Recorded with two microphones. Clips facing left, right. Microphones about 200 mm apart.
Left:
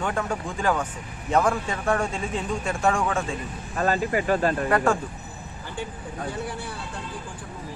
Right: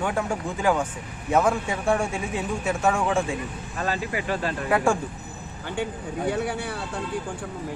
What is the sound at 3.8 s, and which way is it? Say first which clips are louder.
Speech: left 5 dB; 45° left (ahead or behind).